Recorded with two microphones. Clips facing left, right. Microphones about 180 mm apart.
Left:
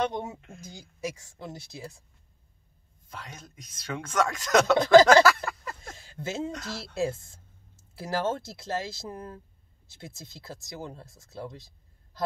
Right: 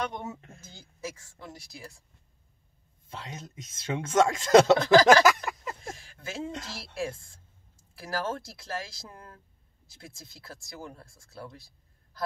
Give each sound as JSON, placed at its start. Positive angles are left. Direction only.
{"t": 0.6, "sound": "speech", "side_deg": 15}
{"t": 3.1, "sound": "speech", "side_deg": -25}
{"t": 5.0, "sound": "a sound", "side_deg": -15}
{"t": 5.9, "sound": "a sound", "side_deg": 25}
{"t": 6.5, "sound": "speech", "side_deg": -25}
{"t": 7.0, "sound": "speech", "side_deg": 25}